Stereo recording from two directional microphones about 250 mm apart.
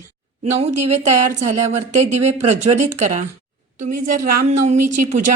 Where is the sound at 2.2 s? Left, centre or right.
Right.